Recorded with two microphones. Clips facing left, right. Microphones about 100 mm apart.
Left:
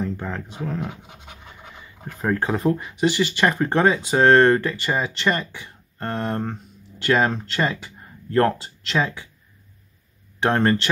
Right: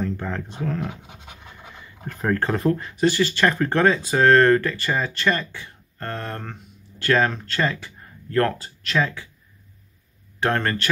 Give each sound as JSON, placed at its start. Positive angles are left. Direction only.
{"t": 0.0, "sound": "speech", "side_deg": 10}
{"t": 10.4, "sound": "speech", "side_deg": 25}